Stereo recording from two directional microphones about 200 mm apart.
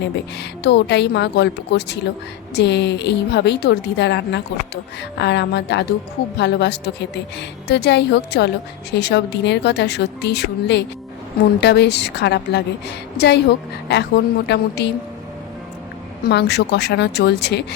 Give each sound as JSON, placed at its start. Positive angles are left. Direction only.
{"t": 0.0, "sound": "a woman's voice", "side_deg": 55}
{"t": 16.2, "sound": "a woman's voice", "side_deg": 55}